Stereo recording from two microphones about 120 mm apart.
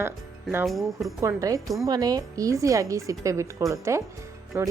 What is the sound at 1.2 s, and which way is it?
A woman's voice, 25° right (ahead or behind).